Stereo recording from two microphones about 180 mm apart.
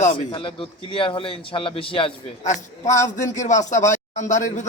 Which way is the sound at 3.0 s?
40° left (ahead or behind).